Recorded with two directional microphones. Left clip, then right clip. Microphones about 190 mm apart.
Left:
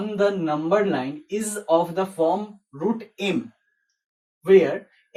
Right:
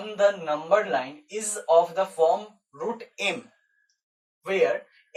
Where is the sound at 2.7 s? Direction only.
10° right (ahead or behind).